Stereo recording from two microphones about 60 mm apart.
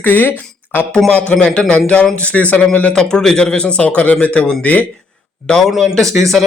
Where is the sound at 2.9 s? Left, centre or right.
Centre.